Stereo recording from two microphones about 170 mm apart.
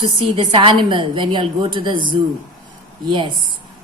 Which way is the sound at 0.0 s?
30° right (ahead or behind).